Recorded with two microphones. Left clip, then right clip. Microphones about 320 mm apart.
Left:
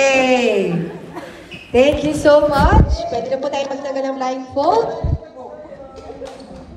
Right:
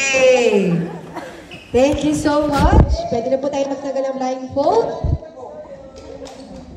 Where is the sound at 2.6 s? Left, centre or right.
Left.